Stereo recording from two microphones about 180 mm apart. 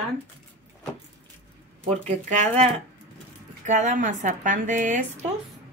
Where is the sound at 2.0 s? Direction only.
40° right (ahead or behind).